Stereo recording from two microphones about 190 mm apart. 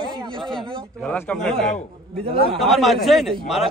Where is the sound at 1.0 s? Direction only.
5° left (ahead or behind).